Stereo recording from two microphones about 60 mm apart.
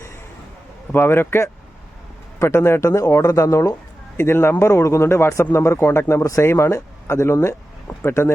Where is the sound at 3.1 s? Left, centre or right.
Left.